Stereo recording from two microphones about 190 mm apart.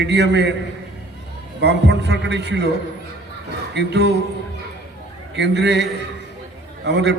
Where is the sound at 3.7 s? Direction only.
60° right (ahead or behind).